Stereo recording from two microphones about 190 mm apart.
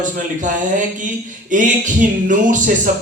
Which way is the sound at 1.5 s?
40° right (ahead or behind).